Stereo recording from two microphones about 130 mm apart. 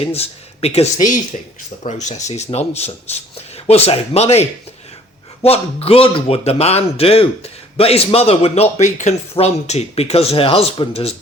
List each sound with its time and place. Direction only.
0.0 s speech: 50° left (ahead or behind)
8.8 s speech: 65° left (ahead or behind); by 11.1 s 50° left (ahead or behind)